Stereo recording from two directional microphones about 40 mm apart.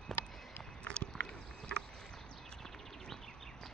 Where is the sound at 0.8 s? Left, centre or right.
Left.